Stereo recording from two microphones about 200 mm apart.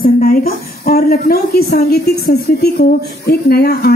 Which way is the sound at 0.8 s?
50° left (ahead or behind).